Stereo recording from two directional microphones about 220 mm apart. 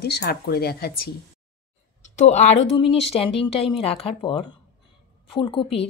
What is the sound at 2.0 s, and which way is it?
Speech, 35° left (ahead or behind).